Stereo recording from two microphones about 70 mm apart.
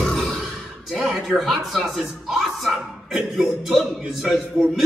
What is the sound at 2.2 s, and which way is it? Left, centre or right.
Speech, centre.